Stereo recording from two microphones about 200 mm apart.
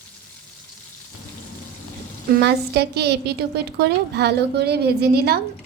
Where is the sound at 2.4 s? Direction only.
55° right (ahead or behind).